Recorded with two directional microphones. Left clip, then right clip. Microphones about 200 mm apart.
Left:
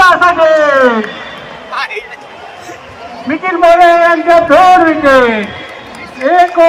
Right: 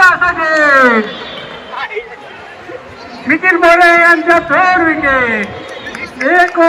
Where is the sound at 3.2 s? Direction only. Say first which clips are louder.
Even; 50° left (ahead or behind).